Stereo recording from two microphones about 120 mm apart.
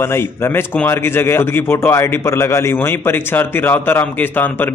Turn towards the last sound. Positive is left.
turn(degrees=15)  # may be behind; listen again after turning